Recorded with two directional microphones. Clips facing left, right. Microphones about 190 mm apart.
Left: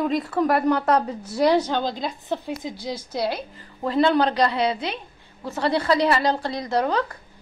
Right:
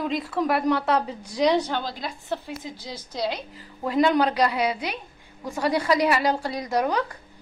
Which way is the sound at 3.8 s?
10° right (ahead or behind).